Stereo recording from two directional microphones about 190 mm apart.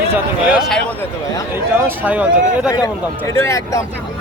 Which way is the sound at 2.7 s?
15° left (ahead or behind).